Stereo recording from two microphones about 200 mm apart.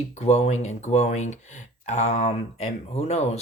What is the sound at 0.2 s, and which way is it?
Speech, 35° left (ahead or behind).